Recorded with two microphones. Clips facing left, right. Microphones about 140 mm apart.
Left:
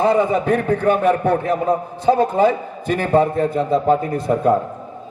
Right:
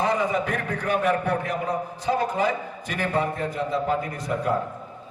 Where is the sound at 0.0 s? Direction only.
30° left (ahead or behind).